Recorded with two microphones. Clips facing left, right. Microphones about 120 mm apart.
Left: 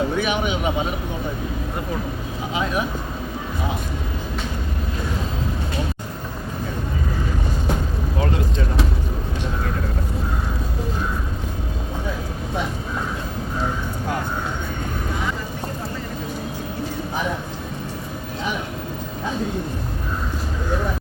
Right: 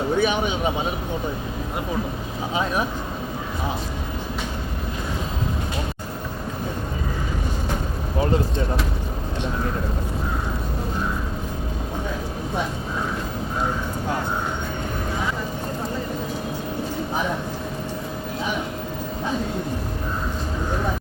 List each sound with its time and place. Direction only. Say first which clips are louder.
0.2 s speech: right 1 dB; 30° right (ahead or behind)